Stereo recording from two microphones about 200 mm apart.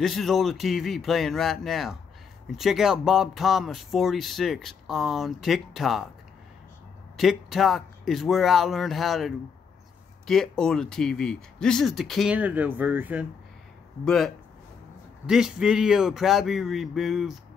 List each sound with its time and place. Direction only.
0.0 s speech: centre (ahead or behind)
7.2 s speech: centre (ahead or behind)